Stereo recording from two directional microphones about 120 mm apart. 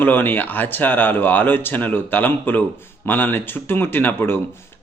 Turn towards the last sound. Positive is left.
turn(degrees=20)  # may be behind; listen again after turning